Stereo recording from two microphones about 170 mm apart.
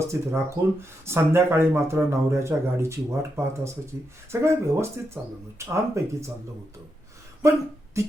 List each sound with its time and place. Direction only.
0.0 s speech: 15° right (ahead or behind)
8.0 s speech: 15° right (ahead or behind)